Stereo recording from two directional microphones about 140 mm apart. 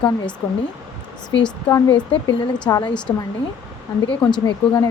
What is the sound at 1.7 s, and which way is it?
Speech, 20° left (ahead or behind).